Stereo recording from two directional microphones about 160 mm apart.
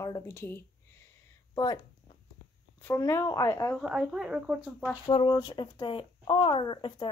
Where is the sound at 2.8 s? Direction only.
15° left (ahead or behind).